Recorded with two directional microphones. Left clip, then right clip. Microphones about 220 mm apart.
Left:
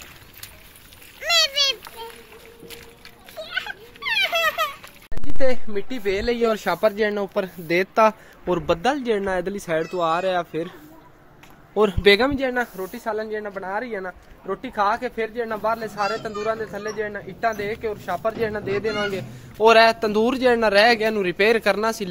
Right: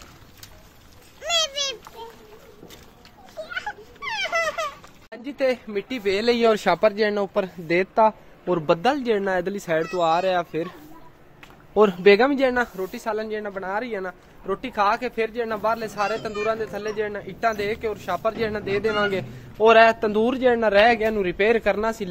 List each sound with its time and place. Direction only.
1.2 s a sound: 25° right (ahead or behind)
3.4 s a sound: 5° right (ahead or behind)
5.4 s speech: centre (ahead or behind)
6.2 s speech: 35° right (ahead or behind)
6.8 s speech: 5° right (ahead or behind)
11.7 s a man's voice: 10° right (ahead or behind)
12.3 s speech: 40° right (ahead or behind)
12.8 s a man's voice: centre (ahead or behind); by 18.9 s 15° right (ahead or behind)
19.6 s a man's voice: 5° left (ahead or behind)